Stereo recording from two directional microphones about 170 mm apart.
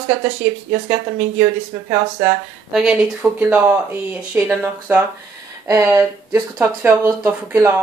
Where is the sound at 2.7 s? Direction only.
5° right (ahead or behind).